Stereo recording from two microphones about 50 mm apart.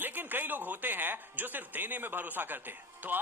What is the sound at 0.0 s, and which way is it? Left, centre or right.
Speech, right.